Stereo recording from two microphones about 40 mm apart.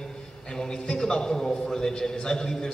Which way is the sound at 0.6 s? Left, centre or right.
Centre.